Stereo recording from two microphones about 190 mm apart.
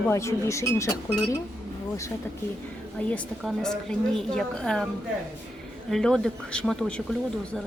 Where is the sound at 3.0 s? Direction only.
5° left (ahead or behind).